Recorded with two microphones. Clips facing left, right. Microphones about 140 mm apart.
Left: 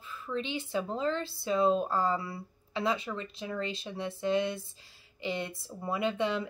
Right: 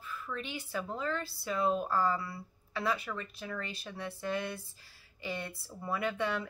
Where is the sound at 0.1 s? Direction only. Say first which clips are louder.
Left 5 dB; 25° left (ahead or behind).